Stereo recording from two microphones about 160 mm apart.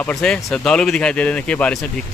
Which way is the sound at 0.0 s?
5° left (ahead or behind).